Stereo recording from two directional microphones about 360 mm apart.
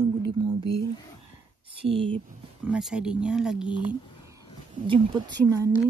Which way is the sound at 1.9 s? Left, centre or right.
Centre.